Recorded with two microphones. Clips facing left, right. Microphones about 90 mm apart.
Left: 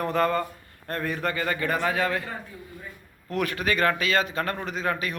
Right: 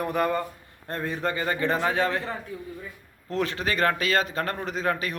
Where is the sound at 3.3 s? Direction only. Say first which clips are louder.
Left 1 dB; 25° right (ahead or behind).